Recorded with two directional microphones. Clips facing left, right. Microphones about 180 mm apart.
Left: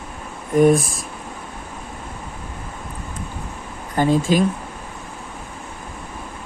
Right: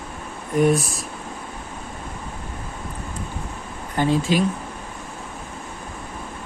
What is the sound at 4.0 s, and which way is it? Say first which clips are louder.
Speech: left 3 dB; 45° left (ahead or behind).